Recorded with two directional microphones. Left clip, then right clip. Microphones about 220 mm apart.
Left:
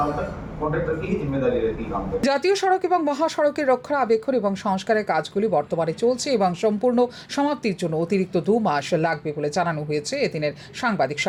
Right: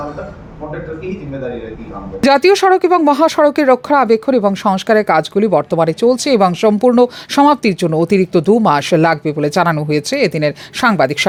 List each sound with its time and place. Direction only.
2.2 s speech: 45° right (ahead or behind)